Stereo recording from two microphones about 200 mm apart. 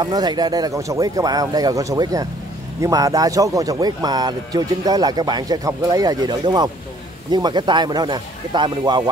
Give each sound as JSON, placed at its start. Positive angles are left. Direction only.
{"t": 0.0, "sound": "speech", "side_deg": -20}